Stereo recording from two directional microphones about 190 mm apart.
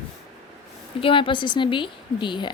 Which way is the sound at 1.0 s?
25° left (ahead or behind).